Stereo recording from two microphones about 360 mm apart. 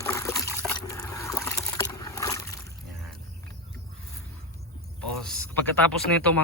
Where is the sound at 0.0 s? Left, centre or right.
Centre.